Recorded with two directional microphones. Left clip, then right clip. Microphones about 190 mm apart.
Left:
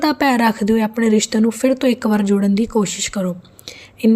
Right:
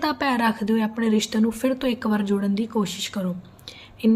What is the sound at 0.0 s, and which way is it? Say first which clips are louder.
Speech: left 7 dB; 35° left (ahead or behind).